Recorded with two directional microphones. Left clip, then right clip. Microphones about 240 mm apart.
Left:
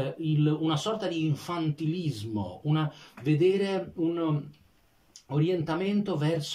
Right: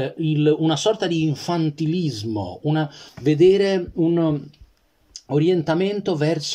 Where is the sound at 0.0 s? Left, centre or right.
Right.